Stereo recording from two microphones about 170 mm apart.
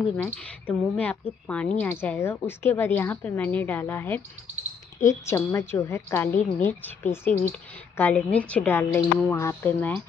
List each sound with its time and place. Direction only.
0.4 s a woman's voice: 10° left (ahead or behind)